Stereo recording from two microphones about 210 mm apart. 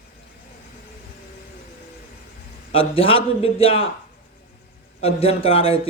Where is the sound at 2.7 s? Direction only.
25° left (ahead or behind).